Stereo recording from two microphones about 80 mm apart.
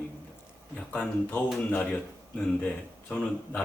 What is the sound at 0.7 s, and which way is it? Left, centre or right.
Speech, centre.